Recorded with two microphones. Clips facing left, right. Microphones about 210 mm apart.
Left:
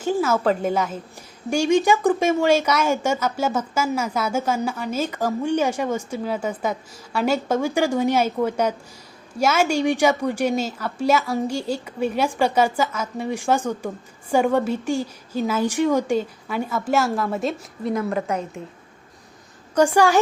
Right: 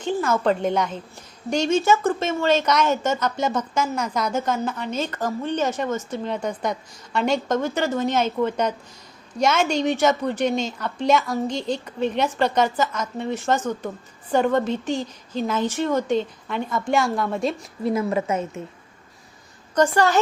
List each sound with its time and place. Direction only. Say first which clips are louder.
0.0 s a woman's voice: left 1 dB; 5° left (ahead or behind)
19.7 s a woman's voice: left 2 dB; 10° left (ahead or behind)